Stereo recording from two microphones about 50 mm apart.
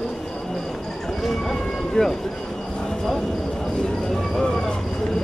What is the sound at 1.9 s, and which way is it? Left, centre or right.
Speech, centre.